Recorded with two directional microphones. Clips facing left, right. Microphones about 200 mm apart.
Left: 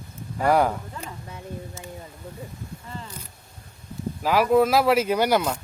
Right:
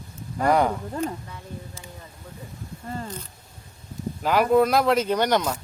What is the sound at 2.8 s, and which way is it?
Speech, 45° right (ahead or behind).